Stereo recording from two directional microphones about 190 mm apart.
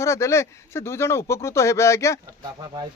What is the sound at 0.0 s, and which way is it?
Speech, 15° left (ahead or behind).